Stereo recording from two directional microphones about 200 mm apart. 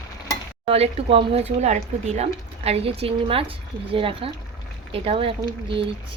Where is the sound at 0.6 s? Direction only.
30° right (ahead or behind).